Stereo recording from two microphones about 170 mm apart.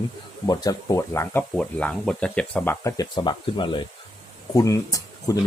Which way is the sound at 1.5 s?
5° left (ahead or behind).